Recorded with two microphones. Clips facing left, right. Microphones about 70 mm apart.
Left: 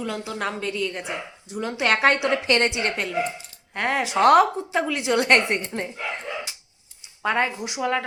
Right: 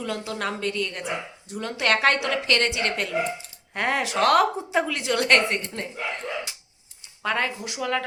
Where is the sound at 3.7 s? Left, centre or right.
Centre.